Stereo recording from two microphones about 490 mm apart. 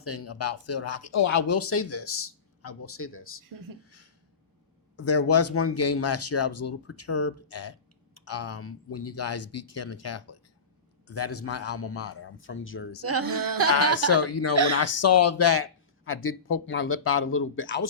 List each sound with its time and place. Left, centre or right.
0.0 s speech: left
4.9 s speech: left
13.2 s a sound: right
14.1 s speech: left